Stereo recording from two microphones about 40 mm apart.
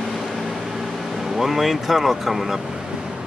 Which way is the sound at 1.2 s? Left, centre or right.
Centre.